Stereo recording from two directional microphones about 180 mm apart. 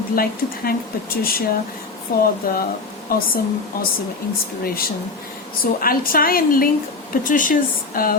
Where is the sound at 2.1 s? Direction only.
60° left (ahead or behind).